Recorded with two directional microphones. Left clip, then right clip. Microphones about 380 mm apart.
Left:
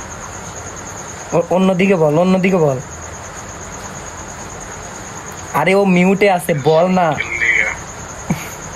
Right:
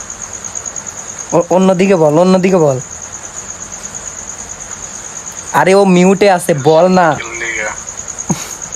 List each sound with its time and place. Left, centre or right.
1.3 s speech: centre
5.5 s speech: centre